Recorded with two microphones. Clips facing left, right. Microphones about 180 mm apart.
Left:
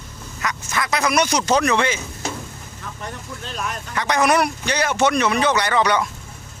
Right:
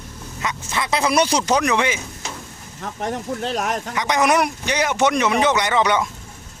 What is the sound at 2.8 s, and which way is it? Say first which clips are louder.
Speech: right 8 dB; 70° right (ahead or behind).